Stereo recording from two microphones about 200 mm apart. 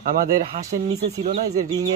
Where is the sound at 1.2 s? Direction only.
35° right (ahead or behind).